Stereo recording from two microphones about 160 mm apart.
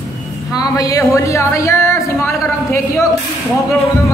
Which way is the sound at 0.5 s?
20° left (ahead or behind).